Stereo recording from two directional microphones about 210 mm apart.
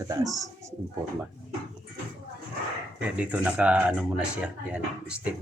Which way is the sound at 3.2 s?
5° right (ahead or behind).